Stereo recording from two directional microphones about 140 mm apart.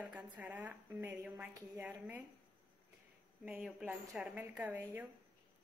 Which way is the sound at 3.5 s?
5° right (ahead or behind).